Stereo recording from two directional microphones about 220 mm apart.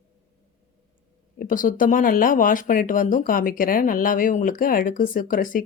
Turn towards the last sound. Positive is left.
turn(degrees=35)  # may be behind; listen again after turning